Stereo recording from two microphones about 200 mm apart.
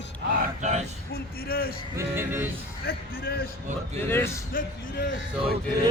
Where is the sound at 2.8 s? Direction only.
50° left (ahead or behind).